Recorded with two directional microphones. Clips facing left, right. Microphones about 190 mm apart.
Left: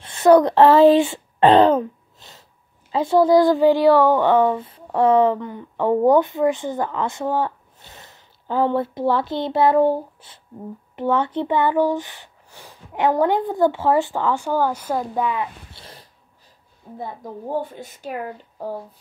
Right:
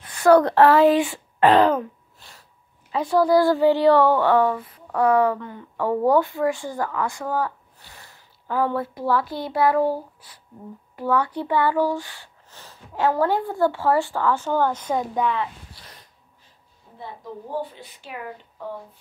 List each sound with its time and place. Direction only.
0.0 s a woman's voice: 25° left (ahead or behind); by 15.4 s 5° left (ahead or behind)
15.7 s a sound: 30° left (ahead or behind)
17.0 s a woman's voice: 45° left (ahead or behind)